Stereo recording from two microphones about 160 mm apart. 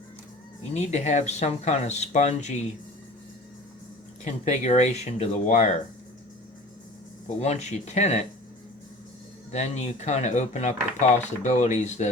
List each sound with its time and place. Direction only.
0.7 s speech: 45° left (ahead or behind)
4.2 s speech: 45° left (ahead or behind)
7.3 s speech: 40° left (ahead or behind)
9.5 s speech: 45° left (ahead or behind)